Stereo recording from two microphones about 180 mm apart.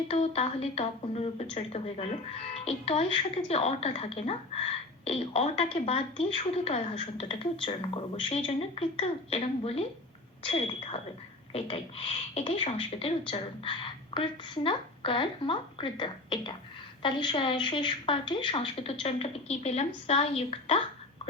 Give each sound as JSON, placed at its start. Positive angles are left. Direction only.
{"t": 0.1, "sound": "speech", "side_deg": 35}